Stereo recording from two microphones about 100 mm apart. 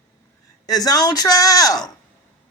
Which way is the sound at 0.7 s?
40° left (ahead or behind).